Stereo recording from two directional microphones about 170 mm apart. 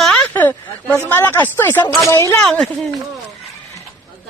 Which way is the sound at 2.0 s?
15° left (ahead or behind).